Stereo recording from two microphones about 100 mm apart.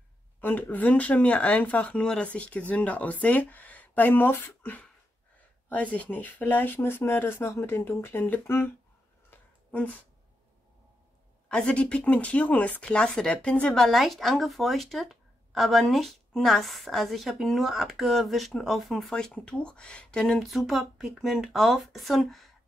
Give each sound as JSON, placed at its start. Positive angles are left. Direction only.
{"t": 0.4, "sound": "speech", "side_deg": 15}
{"t": 9.3, "sound": "a sound", "side_deg": 15}
{"t": 11.4, "sound": "speech", "side_deg": 10}
{"t": 13.8, "sound": "a woman's voice", "side_deg": 0}